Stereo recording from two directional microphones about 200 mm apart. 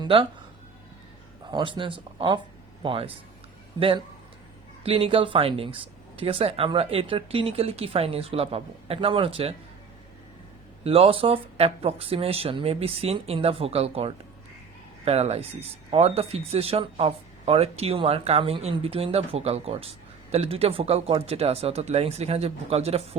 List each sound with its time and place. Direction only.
0.0 s speech: 25° right (ahead or behind)
1.5 s speech: 25° right (ahead or behind)
10.8 s speech: 30° right (ahead or behind)